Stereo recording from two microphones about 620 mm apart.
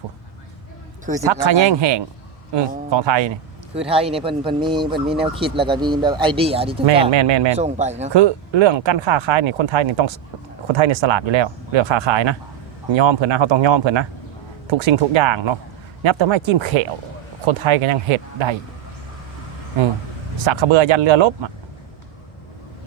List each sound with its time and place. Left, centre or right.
1.2 s speech: right
3.8 s speech: centre
7.1 s speech: right
7.5 s speech: centre
8.1 s speech: right
20.4 s speech: right